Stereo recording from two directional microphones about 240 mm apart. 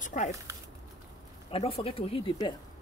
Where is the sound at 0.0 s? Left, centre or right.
Left.